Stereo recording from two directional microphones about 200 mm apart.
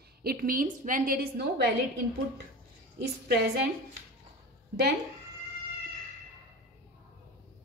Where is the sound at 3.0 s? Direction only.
50° right (ahead or behind).